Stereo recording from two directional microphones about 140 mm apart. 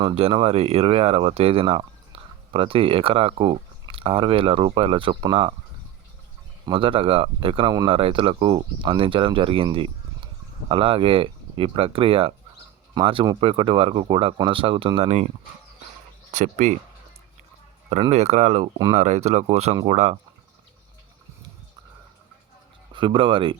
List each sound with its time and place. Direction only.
0.0 s speech: 45° right (ahead or behind)
6.7 s speech: 40° right (ahead or behind)
10.7 s speech: 40° right (ahead or behind)
16.3 s speech: 60° right (ahead or behind)
18.1 s speech: 50° right (ahead or behind)
22.9 s speech: 35° right (ahead or behind)